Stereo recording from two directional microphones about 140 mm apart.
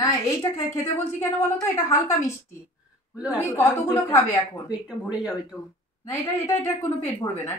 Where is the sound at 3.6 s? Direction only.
25° left (ahead or behind).